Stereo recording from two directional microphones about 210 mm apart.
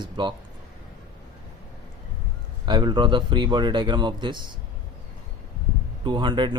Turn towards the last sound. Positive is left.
turn(degrees=-20)  # may be behind; listen again after turning